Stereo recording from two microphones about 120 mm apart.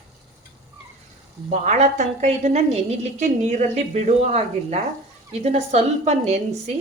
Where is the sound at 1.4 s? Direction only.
75° right (ahead or behind).